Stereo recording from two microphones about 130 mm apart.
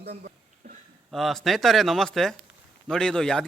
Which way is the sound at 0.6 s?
60° right (ahead or behind).